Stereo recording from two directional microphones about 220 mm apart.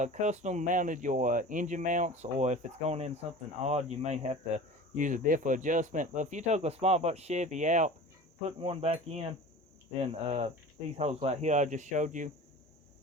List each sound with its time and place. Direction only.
0.0 s speech: 35° right (ahead or behind)
3.6 s cricket: 30° right (ahead or behind)
4.9 s speech: 35° right (ahead or behind)
8.4 s cricket: 25° right (ahead or behind)
10.9 s speech: 30° right (ahead or behind)